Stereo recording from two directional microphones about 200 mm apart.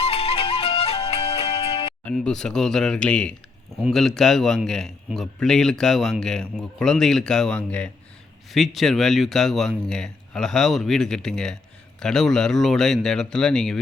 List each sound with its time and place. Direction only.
0.0 s music: 30° left (ahead or behind)
2.0 s a man's voice: 5° left (ahead or behind)